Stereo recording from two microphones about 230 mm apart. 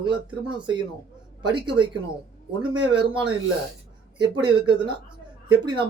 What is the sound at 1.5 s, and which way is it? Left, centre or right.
Speech, right.